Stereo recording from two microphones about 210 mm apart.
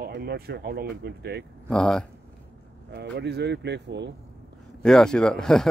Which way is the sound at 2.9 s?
55° right (ahead or behind).